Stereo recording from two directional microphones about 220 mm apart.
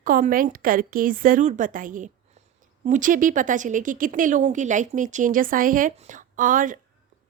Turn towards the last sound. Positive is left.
turn(degrees=-35)  # may be behind; listen again after turning